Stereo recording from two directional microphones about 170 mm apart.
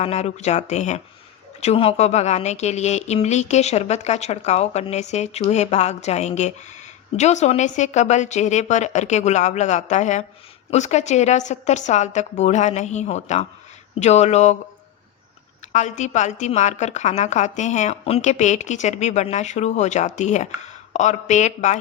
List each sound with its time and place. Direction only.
0.0 s a woman's voice: 40° left (ahead or behind)
15.7 s a woman's voice: 45° left (ahead or behind)